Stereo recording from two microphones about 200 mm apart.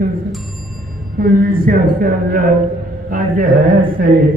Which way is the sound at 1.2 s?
45° right (ahead or behind).